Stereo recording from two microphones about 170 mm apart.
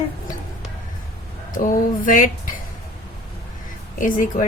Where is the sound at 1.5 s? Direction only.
50° left (ahead or behind).